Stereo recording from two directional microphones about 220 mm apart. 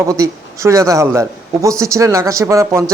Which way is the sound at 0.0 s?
15° right (ahead or behind).